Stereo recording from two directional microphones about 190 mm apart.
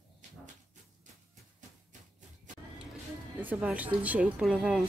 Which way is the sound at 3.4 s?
10° right (ahead or behind).